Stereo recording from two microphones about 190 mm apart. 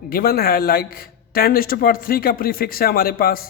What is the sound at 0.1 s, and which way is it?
A man's voice, 50° left (ahead or behind).